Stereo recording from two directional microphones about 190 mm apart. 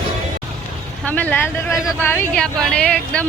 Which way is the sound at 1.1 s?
10° left (ahead or behind).